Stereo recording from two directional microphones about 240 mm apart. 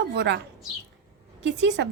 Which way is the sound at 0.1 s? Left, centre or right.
Right.